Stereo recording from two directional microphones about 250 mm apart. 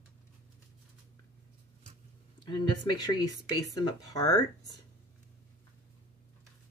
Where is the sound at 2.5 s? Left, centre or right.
Centre.